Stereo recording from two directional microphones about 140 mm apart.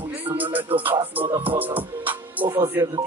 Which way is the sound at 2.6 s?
20° right (ahead or behind).